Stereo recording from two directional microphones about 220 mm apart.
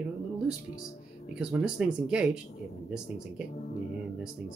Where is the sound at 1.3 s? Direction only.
5° right (ahead or behind).